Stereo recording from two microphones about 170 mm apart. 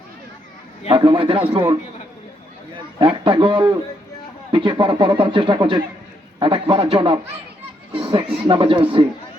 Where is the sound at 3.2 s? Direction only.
30° right (ahead or behind).